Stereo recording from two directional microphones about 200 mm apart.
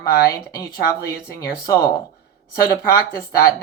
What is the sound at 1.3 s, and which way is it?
Speech, 15° left (ahead or behind).